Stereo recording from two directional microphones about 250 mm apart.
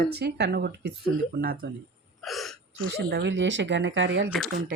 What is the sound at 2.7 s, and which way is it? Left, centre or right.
Speech, right.